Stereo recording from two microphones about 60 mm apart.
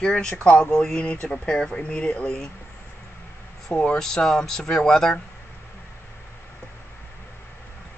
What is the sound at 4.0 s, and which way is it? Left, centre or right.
Speech, centre.